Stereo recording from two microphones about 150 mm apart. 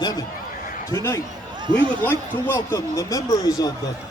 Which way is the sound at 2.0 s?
15° left (ahead or behind).